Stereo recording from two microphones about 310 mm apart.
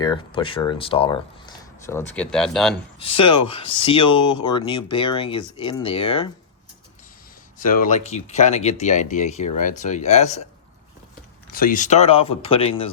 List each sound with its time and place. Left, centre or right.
0.0 s speech: centre
3.0 s speech: centre
7.6 s speech: left
11.5 s speech: left